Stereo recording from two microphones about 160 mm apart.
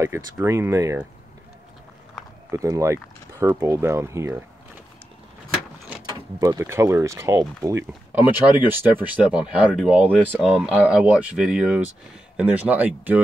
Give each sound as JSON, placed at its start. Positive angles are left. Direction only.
{"t": 0.0, "sound": "speech", "side_deg": -15}
{"t": 2.5, "sound": "speech", "side_deg": -20}
{"t": 6.0, "sound": "speech", "side_deg": -20}